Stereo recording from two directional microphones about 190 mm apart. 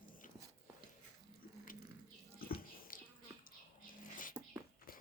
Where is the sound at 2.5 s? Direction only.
50° left (ahead or behind).